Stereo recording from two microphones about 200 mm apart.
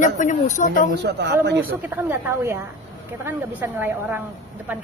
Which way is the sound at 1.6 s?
10° right (ahead or behind).